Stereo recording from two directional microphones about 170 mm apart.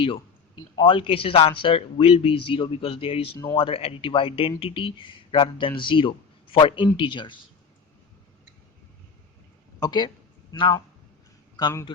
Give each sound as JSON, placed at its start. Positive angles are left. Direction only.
{"t": 0.8, "sound": "speech", "side_deg": 30}
{"t": 9.8, "sound": "speech", "side_deg": 25}